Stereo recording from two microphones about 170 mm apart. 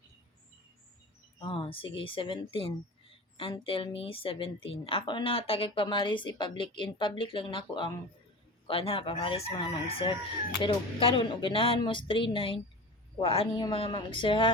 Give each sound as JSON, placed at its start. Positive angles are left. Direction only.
{"t": 1.4, "sound": "a woman's voice", "side_deg": 30}